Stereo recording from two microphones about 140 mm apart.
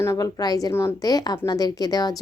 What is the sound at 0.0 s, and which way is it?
A woman's voice, 25° left (ahead or behind).